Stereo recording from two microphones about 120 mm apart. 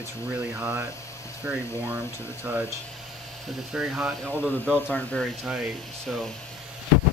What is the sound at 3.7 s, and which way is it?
Speech, 5° right (ahead or behind).